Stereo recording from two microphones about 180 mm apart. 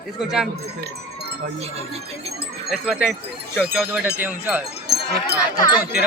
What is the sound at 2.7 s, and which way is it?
Speech, 5° right (ahead or behind).